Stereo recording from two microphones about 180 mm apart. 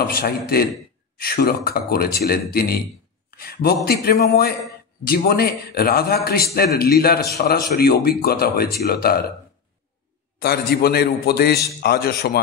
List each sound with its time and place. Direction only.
0.0 s a man's voice: 60° left (ahead or behind)
10.4 s a man's voice: 60° left (ahead or behind)